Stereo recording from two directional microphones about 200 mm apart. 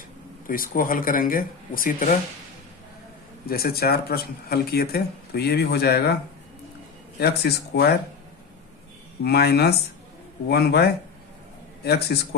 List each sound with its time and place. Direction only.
0.4 s speech: 45° left (ahead or behind)
3.4 s speech: 50° left (ahead or behind)
7.2 s speech: 55° left (ahead or behind)
9.2 s speech: 55° left (ahead or behind)
11.9 s speech: 55° left (ahead or behind)